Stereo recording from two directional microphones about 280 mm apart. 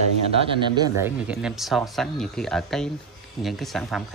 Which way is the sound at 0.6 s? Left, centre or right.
Centre.